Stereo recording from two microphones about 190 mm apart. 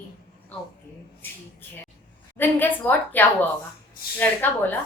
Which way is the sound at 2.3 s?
10° left (ahead or behind).